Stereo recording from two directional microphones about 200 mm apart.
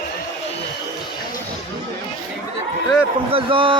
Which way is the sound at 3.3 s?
25° right (ahead or behind).